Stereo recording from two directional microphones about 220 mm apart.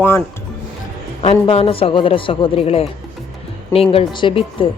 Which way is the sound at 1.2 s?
25° left (ahead or behind).